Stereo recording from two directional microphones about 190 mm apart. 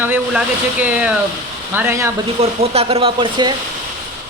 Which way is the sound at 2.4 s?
30° right (ahead or behind).